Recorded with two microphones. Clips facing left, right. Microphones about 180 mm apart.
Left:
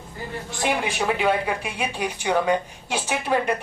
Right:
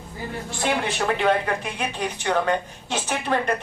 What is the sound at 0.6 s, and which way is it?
Speech, 10° left (ahead or behind).